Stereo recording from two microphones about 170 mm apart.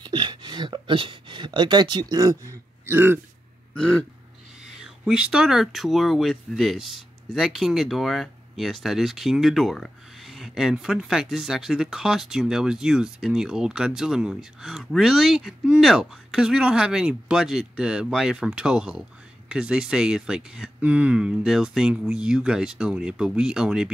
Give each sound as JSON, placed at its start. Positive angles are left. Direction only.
{"t": 0.0, "sound": "speech", "side_deg": -25}
{"t": 3.7, "sound": "burping", "side_deg": 5}
{"t": 4.7, "sound": "speech", "side_deg": -5}